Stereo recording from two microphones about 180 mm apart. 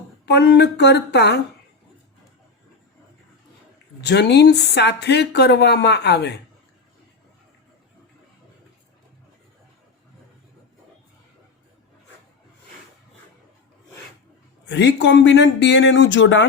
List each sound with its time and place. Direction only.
0.3 s speech: 65° left (ahead or behind)
4.0 s speech: 70° left (ahead or behind)
14.7 s speech: 80° left